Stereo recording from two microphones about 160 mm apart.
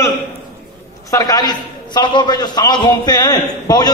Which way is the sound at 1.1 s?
25° left (ahead or behind).